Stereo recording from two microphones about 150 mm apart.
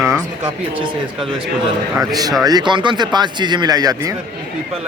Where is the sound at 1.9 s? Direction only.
25° right (ahead or behind).